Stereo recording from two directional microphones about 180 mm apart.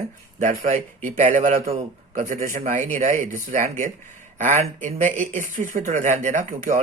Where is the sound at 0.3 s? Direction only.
45° right (ahead or behind).